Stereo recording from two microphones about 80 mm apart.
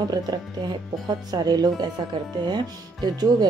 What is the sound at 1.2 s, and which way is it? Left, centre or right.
Speech, right.